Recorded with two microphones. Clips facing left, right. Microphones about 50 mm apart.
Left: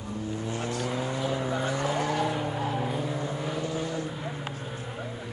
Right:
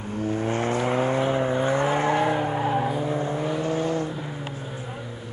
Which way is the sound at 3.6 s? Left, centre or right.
Right.